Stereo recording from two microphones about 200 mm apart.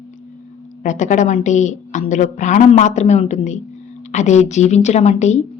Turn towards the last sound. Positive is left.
turn(degrees=35)  # may be behind; listen again after turning